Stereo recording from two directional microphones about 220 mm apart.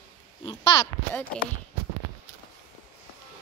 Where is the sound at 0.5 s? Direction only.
20° left (ahead or behind).